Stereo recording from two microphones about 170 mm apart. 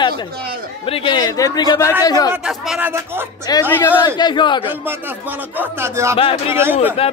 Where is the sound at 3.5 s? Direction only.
25° left (ahead or behind).